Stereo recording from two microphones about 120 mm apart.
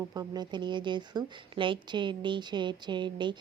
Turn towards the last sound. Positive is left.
turn(degrees=-40)  # may be behind; listen again after turning